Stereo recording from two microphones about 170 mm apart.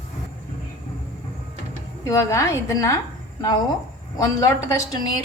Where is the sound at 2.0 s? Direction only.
15° left (ahead or behind).